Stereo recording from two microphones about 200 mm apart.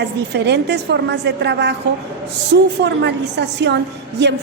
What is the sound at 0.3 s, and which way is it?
Speech, 60° right (ahead or behind).